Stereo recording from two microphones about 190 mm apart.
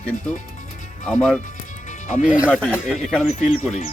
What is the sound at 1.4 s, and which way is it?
Music, 40° left (ahead or behind).